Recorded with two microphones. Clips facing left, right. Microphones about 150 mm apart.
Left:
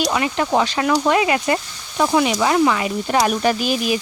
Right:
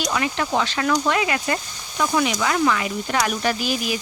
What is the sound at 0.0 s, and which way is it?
Speech, 25° left (ahead or behind).